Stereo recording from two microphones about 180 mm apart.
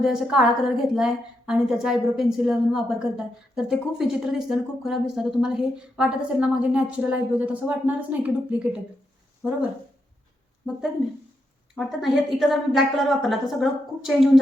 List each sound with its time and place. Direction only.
0.0 s a woman's voice: 5° right (ahead or behind)
10.6 s a woman's voice: centre (ahead or behind)